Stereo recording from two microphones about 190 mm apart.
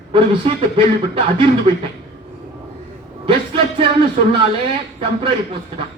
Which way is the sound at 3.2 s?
30° right (ahead or behind).